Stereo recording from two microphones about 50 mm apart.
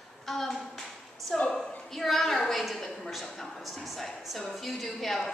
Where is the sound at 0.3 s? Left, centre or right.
Centre.